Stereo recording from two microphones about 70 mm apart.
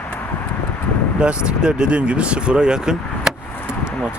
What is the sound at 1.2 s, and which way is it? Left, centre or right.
Speech, centre.